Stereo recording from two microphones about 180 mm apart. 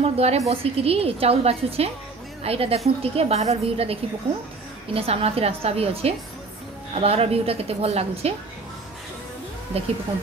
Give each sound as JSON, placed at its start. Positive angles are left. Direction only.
{"t": 0.0, "sound": "a sound", "side_deg": -35}
{"t": 0.5, "sound": "a woman's voice", "side_deg": -35}
{"t": 9.7, "sound": "a woman's voice", "side_deg": -35}